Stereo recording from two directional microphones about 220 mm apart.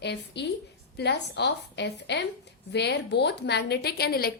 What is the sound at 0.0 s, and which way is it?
A woman's voice, 50° left (ahead or behind).